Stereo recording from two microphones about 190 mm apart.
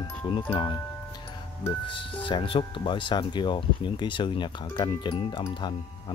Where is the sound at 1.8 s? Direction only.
25° left (ahead or behind).